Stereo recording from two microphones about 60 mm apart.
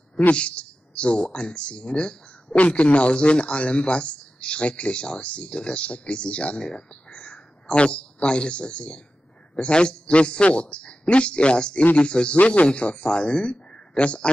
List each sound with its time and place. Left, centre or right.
0.2 s a man's voice: centre